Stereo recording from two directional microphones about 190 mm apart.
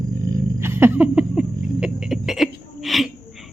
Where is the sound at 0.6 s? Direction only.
15° right (ahead or behind).